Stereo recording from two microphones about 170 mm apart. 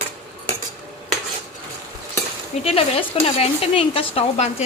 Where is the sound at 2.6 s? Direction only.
35° left (ahead or behind).